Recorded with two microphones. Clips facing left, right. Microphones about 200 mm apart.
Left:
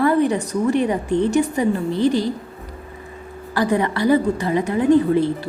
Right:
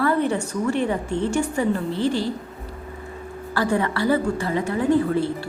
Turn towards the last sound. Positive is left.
turn(degrees=20)  # may be behind; listen again after turning